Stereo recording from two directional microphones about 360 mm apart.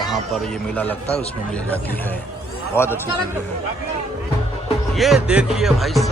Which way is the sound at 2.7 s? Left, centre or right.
Centre.